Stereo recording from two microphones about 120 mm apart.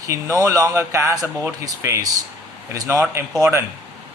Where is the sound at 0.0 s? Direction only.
25° right (ahead or behind).